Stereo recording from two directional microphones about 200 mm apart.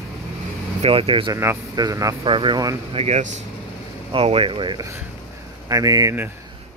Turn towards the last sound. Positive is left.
turn(degrees=-15)  # may be behind; listen again after turning